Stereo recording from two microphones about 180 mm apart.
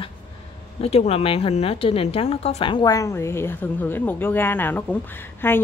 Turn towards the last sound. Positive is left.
turn(degrees=10)  # may be behind; listen again after turning